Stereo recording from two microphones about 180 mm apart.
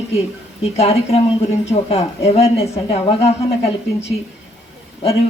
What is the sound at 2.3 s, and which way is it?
Speech, 35° left (ahead or behind).